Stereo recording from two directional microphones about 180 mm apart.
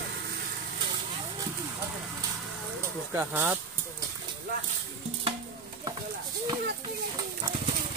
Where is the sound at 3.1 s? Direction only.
10° right (ahead or behind).